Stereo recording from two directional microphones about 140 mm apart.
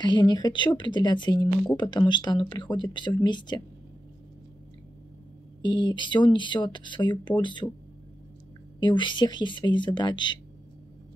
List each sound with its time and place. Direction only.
0.0 s speech: 30° left (ahead or behind)
5.6 s speech: 30° left (ahead or behind)
8.8 s speech: 35° left (ahead or behind)